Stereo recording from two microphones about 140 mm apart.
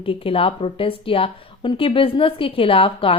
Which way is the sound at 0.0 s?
40° left (ahead or behind).